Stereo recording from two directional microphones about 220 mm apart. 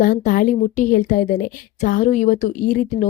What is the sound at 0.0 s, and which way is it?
Speech, 35° left (ahead or behind).